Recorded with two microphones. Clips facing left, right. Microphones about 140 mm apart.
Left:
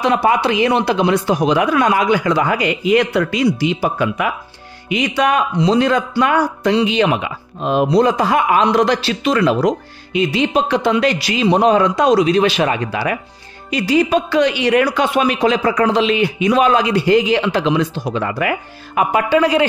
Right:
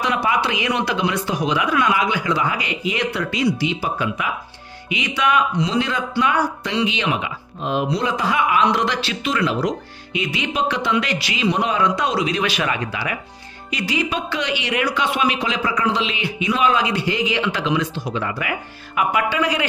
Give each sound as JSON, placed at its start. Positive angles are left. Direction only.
{"t": 0.0, "sound": "speech", "side_deg": 35}
{"t": 10.2, "sound": "a man's voice", "side_deg": 35}
{"t": 18.9, "sound": "a man's voice", "side_deg": 35}